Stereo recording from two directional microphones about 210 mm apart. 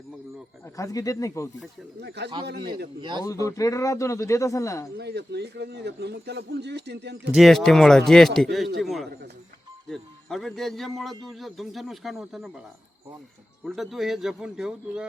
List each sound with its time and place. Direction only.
0.6 s speech: 15° left (ahead or behind)
2.0 s a man's voice: 55° right (ahead or behind)
3.0 s speech: 20° right (ahead or behind)
3.2 s speech: 15° left (ahead or behind)
4.9 s a man's voice: 55° right (ahead or behind)
7.3 s a man's voice: centre (ahead or behind)
13.7 s a man's voice: centre (ahead or behind)